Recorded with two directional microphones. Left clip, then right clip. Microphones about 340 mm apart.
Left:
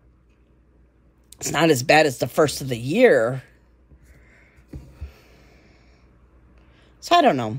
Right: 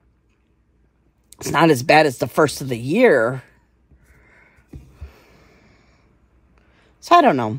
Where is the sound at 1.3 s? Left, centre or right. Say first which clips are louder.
Right 3 dB; centre.